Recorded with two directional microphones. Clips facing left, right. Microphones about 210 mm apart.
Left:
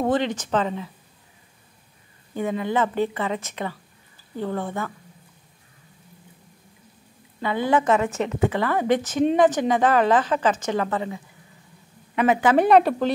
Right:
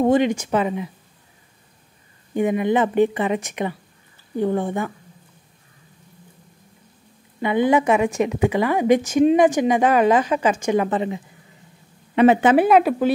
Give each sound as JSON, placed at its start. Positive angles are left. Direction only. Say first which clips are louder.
{"t": 0.0, "sound": "a woman's voice", "louder": "right 5 dB", "side_deg": -15}
{"t": 2.3, "sound": "a woman's voice", "louder": "right 5 dB", "side_deg": -15}
{"t": 7.3, "sound": "a woman's voice", "louder": "right 4 dB", "side_deg": -15}
{"t": 12.5, "sound": "a woman's voice", "louder": "right 1 dB", "side_deg": -5}